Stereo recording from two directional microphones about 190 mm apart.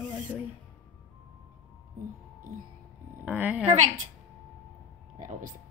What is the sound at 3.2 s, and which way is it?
Speech, 10° right (ahead or behind).